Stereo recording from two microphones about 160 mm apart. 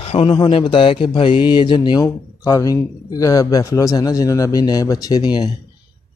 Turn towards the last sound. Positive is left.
turn(degrees=25)  # may be behind; listen again after turning